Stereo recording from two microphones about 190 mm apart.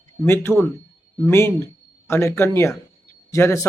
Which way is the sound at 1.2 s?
15° left (ahead or behind).